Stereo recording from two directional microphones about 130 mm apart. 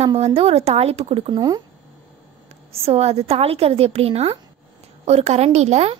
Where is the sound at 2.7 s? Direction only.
50° right (ahead or behind).